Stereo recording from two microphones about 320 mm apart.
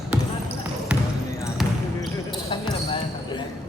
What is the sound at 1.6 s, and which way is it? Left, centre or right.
Basketball bounce, centre.